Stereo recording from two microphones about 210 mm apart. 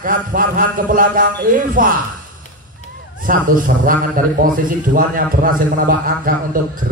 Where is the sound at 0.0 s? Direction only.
40° right (ahead or behind).